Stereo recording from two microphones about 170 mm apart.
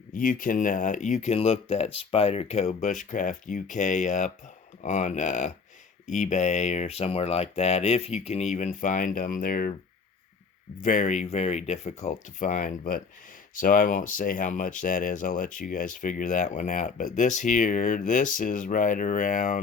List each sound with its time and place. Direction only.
0.1 s speech: 50° left (ahead or behind)
10.8 s speech: 45° left (ahead or behind)